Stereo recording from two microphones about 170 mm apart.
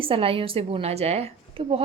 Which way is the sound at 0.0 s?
30° right (ahead or behind).